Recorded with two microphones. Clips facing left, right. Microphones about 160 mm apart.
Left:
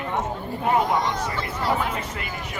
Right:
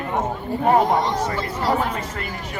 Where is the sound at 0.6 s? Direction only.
40° right (ahead or behind).